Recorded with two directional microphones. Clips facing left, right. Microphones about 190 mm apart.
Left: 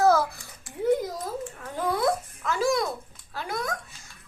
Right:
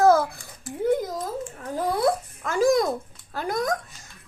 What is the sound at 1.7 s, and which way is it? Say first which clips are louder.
Babbling: right 2 dB; 35° right (ahead or behind).